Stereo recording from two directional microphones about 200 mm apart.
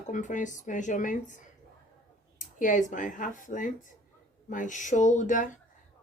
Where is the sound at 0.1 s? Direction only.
40° left (ahead or behind).